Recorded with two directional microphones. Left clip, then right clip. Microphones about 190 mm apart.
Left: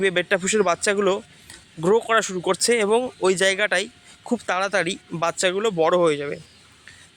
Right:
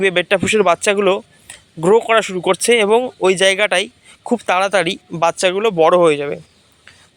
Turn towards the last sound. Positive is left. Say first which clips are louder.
# right 7 dB
turn(degrees=-15)  # may be behind; listen again after turning